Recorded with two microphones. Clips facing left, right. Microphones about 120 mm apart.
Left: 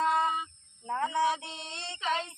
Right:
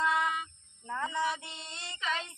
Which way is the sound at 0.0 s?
30° left (ahead or behind).